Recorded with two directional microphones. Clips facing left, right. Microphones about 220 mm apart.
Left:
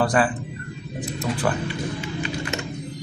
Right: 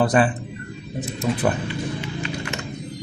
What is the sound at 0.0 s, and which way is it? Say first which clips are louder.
Speech: right 2 dB; 20° right (ahead or behind).